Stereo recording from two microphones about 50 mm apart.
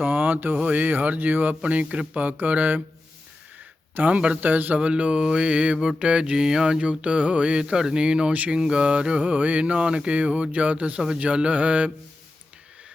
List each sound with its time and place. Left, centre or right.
0.0 s speech: right
3.9 s mantra: right
6.0 s a sound: right
7.0 s mantra: right